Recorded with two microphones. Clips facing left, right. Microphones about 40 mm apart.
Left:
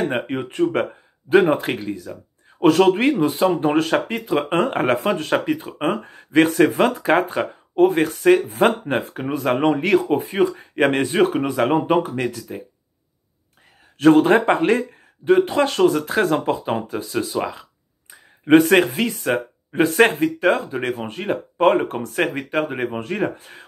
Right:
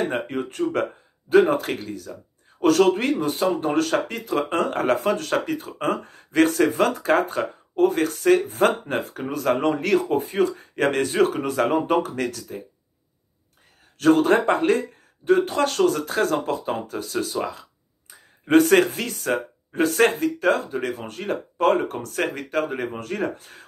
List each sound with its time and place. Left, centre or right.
0.1 s speech: left
9.1 s speech: left
13.9 s speech: left